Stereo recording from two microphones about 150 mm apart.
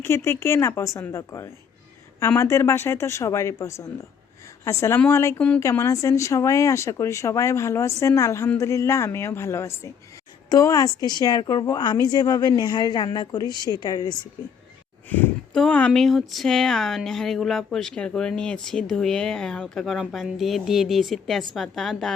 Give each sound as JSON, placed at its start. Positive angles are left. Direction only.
{"t": 0.0, "sound": "speech", "side_deg": 15}
{"t": 15.1, "sound": "speech", "side_deg": 10}